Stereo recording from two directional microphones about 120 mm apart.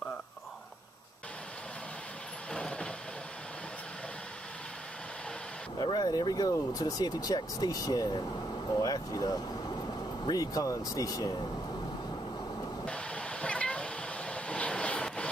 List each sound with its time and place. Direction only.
2.5 s vehicle: 5° left (ahead or behind)
5.8 s speech: 35° left (ahead or behind)
12.8 s a sound: 10° left (ahead or behind)